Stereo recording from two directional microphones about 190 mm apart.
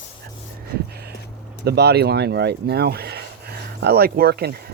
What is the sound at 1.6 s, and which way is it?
Speech, 60° right (ahead or behind).